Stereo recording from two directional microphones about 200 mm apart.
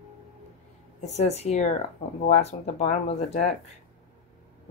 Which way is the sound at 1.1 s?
30° left (ahead or behind).